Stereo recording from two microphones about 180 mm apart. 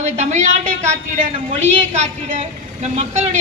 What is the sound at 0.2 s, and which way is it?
A woman's voice, 40° right (ahead or behind).